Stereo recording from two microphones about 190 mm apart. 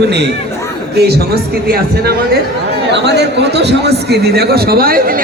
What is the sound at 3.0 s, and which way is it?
A man's voice, 60° right (ahead or behind).